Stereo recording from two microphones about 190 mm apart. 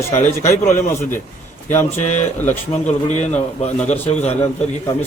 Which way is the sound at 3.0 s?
35° left (ahead or behind).